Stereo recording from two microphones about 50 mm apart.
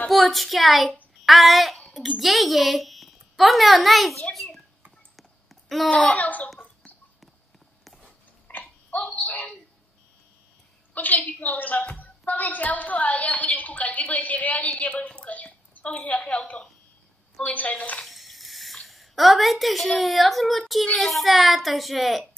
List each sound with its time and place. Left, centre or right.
0.1 s a woman's voice: centre
1.2 s a sound: centre
2.0 s speech: centre
5.1 s a sound: centre
5.9 s speech: centre
6.1 s a woman's voice: left
7.8 s a sound: centre
8.5 s a sound: left
9.1 s a woman's voice: left
11.0 s a woman's voice: left
18.0 s stir: centre
18.9 s a woman's voice: centre